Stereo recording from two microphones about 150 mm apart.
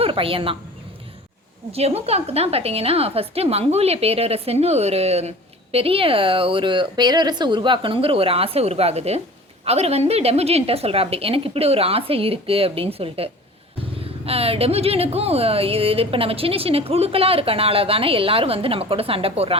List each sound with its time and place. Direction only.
0.0 s speech: 35° right (ahead or behind)
1.7 s a woman's voice: 45° right (ahead or behind)